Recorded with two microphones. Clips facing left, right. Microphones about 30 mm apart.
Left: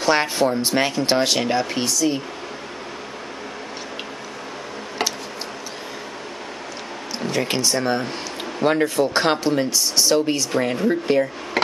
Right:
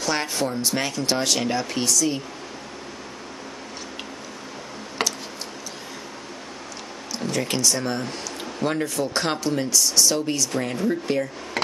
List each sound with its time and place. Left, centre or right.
0.0 s speech: left
7.2 s speech: left